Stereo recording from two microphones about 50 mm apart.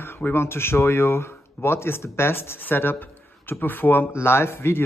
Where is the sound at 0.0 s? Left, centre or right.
Left.